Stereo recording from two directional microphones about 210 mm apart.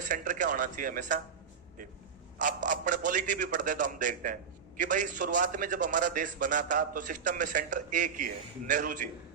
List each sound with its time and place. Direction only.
0.0 s a man's voice: 40° right (ahead or behind)
2.4 s a man's voice: 40° right (ahead or behind)